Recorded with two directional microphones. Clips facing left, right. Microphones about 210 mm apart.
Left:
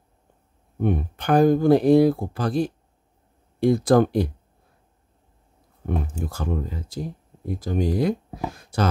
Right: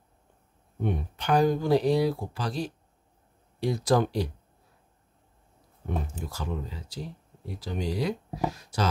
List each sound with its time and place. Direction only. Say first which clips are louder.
0.7 s speech: left 7 dB; 50° left (ahead or behind)
5.9 s speech: left 6 dB; 55° left (ahead or behind)